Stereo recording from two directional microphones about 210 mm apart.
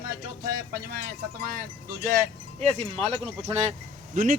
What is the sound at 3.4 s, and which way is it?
Speech, 30° right (ahead or behind).